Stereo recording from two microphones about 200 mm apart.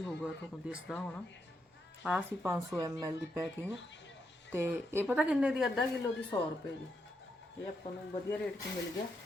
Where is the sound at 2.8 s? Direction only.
20° right (ahead or behind).